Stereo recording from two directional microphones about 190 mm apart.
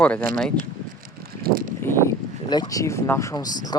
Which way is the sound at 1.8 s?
10° left (ahead or behind).